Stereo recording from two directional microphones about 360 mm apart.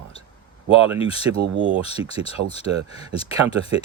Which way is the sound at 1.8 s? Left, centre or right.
Centre.